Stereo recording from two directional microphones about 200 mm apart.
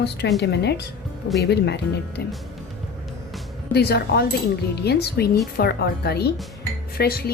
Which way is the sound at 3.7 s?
55° left (ahead or behind).